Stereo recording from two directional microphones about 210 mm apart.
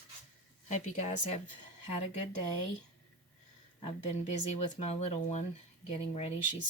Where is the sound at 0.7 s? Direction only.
35° left (ahead or behind).